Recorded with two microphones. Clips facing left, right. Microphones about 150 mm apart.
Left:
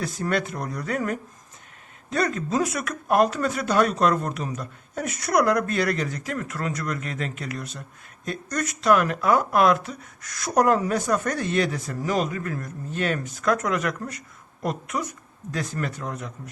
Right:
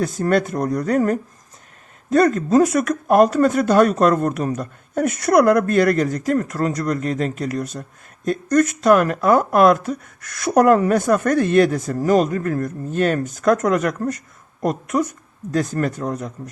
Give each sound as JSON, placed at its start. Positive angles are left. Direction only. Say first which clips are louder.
{"t": 0.0, "sound": "speech", "louder": "right 7 dB", "side_deg": -45}